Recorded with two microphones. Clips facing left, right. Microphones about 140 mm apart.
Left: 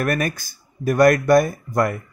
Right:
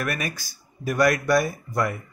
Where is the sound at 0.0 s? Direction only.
45° left (ahead or behind).